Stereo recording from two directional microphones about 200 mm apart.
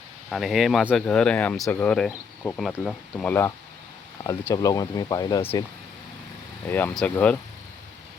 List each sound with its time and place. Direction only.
0.3 s speech: centre (ahead or behind); by 5.6 s 15° left (ahead or behind)
6.7 s speech: 10° left (ahead or behind)